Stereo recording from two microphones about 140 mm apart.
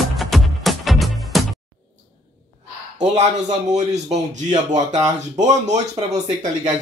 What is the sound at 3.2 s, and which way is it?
Speech, 55° right (ahead or behind).